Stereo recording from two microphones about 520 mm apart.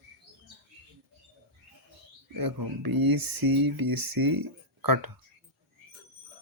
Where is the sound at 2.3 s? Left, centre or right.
Right.